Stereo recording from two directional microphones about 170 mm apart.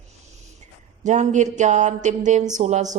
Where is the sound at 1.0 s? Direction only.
45° right (ahead or behind).